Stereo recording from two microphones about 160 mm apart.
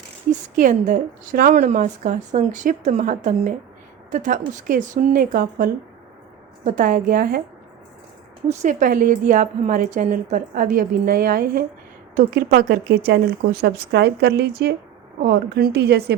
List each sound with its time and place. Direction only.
0.3 s a woman's voice: 50° right (ahead or behind); by 7.4 s 65° right (ahead or behind)
8.6 s a woman's voice: 55° right (ahead or behind); by 14.8 s 90° right
15.2 s a woman's voice: 75° right (ahead or behind)